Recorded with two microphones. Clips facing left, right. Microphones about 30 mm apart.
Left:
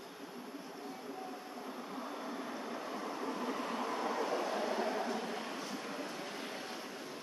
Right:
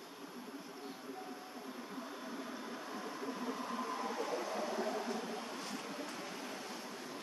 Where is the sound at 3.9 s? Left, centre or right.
Left.